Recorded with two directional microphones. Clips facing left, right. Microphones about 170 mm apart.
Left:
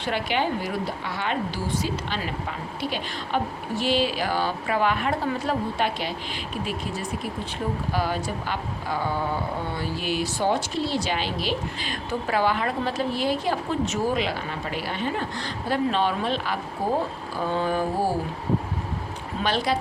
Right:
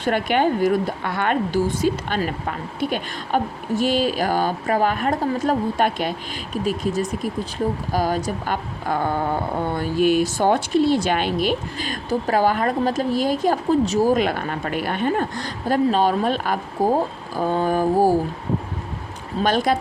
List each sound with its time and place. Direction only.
0.0 s speech: 50° right (ahead or behind)
19.4 s speech: 45° right (ahead or behind)